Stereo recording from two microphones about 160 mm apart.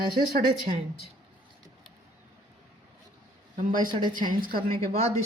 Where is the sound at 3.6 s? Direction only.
55° right (ahead or behind).